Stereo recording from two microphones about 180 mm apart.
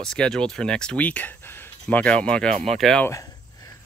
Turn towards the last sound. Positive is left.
turn(degrees=20)  # may be behind; listen again after turning